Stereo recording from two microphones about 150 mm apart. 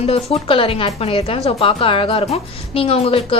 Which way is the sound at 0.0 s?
40° left (ahead or behind).